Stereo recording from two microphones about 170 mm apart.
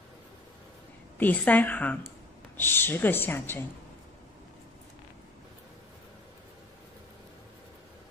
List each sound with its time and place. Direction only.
1.1 s speech: 10° left (ahead or behind)